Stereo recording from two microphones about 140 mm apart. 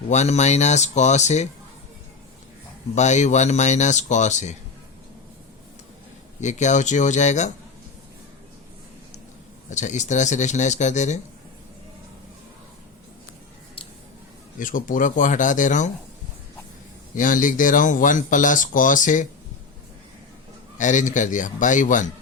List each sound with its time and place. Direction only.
0.1 s speech: 55° left (ahead or behind)
2.9 s speech: 55° left (ahead or behind)
6.4 s speech: 60° left (ahead or behind)
9.6 s speech: 60° left (ahead or behind)
14.6 s speech: 75° left (ahead or behind)
17.2 s speech: 70° left (ahead or behind)
20.7 s speech: 65° left (ahead or behind)